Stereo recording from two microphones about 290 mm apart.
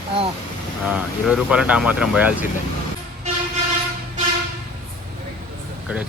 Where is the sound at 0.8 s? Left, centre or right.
Centre.